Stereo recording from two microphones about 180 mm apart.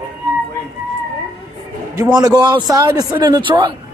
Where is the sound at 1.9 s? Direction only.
20° right (ahead or behind).